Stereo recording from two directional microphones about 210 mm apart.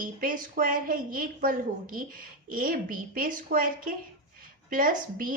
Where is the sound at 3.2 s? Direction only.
40° right (ahead or behind).